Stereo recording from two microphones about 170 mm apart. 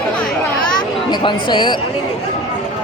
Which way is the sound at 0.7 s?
25° left (ahead or behind).